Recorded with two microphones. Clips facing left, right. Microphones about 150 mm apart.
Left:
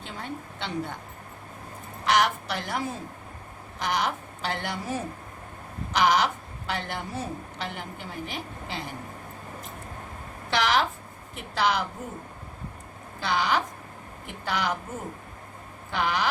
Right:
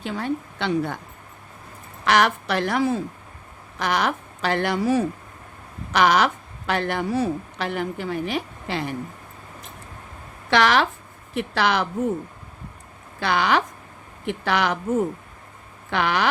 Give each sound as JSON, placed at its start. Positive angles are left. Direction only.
{"t": 0.0, "sound": "a woman's voice", "side_deg": -80}
{"t": 2.0, "sound": "a woman's voice", "side_deg": -70}
{"t": 10.5, "sound": "a woman's voice", "side_deg": -75}
{"t": 13.1, "sound": "a woman's voice", "side_deg": -70}
{"t": 15.9, "sound": "a woman's voice", "side_deg": -75}